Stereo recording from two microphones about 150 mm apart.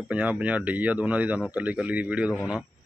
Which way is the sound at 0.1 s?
10° right (ahead or behind).